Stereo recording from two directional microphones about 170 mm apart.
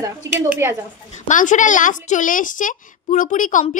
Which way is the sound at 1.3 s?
50° left (ahead or behind).